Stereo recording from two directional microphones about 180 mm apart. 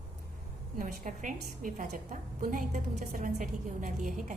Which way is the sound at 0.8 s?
50° right (ahead or behind).